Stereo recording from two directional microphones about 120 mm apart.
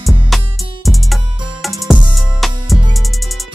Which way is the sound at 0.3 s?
Centre (ahead or behind).